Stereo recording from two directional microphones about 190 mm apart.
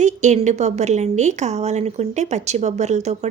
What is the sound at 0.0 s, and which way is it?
A woman's voice, 40° right (ahead or behind).